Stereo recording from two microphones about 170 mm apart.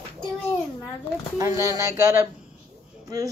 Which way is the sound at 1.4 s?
20° right (ahead or behind).